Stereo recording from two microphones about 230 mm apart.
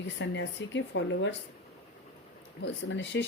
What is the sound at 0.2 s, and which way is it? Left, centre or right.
Speech, left.